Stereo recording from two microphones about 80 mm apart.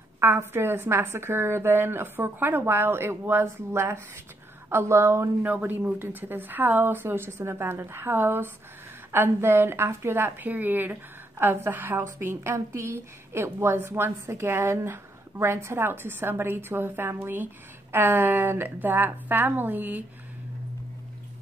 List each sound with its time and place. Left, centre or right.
0.2 s a woman's voice: right
5.5 s a woman's voice: right